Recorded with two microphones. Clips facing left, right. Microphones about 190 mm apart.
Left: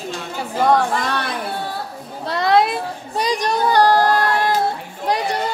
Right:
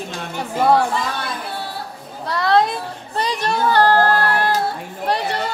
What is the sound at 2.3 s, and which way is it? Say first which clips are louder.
Female singing: left 1 dB; 15° left (ahead or behind).